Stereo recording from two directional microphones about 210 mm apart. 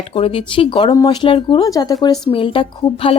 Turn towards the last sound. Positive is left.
turn(degrees=25)  # may be behind; listen again after turning